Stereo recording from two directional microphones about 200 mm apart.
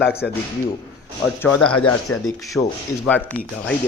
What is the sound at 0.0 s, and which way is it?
Speech, 55° left (ahead or behind).